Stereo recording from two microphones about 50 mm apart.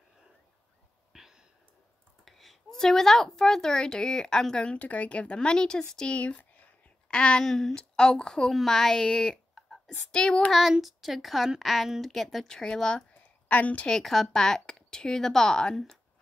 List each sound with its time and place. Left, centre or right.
1.1 s a sound: centre
2.2 s a woman's voice: centre
4.6 s a woman's voice: left
6.1 s a woman's voice: left
10.7 s a woman's voice: centre
12.4 s a woman's voice: centre
13.5 s a woman's voice: left
13.8 s a woman's voice: centre